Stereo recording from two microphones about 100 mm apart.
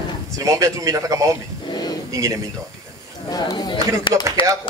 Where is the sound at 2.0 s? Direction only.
35° right (ahead or behind).